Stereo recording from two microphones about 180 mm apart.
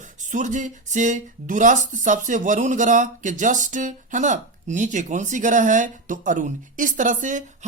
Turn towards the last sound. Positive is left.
turn(degrees=-45)  # may be behind; listen again after turning